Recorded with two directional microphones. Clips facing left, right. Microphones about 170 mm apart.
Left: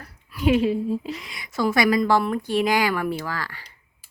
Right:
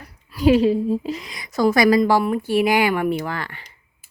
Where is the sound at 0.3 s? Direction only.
35° right (ahead or behind).